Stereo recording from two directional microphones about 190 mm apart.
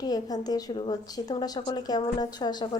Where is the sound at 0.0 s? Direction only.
20° left (ahead or behind).